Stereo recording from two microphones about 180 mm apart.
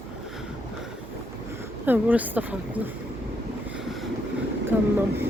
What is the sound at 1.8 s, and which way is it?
Speech, 10° right (ahead or behind).